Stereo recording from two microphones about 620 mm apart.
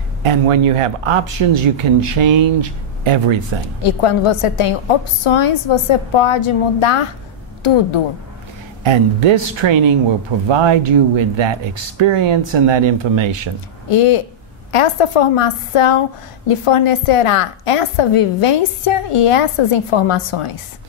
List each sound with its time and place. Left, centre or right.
0.2 s speech: right
3.8 s a woman's voice: left
8.8 s speech: right
13.8 s a woman's voice: left